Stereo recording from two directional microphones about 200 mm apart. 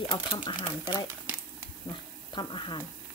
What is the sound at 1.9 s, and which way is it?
Speech, 25° left (ahead or behind).